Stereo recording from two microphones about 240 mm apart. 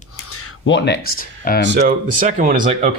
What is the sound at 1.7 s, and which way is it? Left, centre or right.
Speech, right.